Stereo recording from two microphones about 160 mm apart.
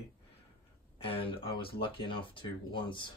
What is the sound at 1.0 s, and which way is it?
Speech, 35° left (ahead or behind).